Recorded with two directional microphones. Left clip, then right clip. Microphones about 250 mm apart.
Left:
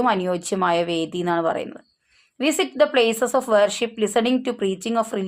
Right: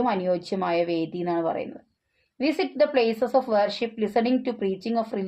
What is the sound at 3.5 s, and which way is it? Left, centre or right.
Speech, left.